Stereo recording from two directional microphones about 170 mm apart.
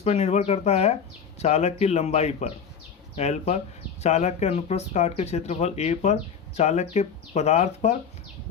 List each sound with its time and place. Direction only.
0.0 s speech: 40° left (ahead or behind)